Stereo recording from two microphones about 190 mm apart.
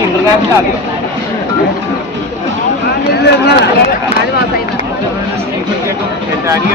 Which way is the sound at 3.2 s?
60° left (ahead or behind).